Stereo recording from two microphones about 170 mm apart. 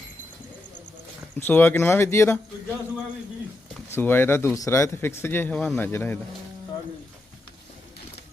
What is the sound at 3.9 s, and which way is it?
Speech, 10° left (ahead or behind).